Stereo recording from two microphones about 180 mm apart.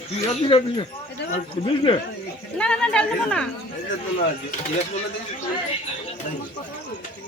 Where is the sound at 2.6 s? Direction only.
5° left (ahead or behind).